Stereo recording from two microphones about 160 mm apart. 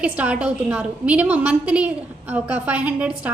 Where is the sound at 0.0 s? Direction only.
10° right (ahead or behind).